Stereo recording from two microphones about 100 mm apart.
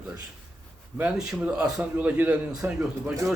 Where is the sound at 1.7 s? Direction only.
15° right (ahead or behind).